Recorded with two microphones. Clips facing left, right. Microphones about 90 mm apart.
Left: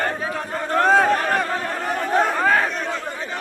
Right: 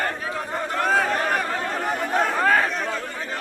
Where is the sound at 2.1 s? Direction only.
5° left (ahead or behind).